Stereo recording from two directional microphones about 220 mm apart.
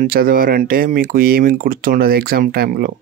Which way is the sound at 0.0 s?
40° right (ahead or behind).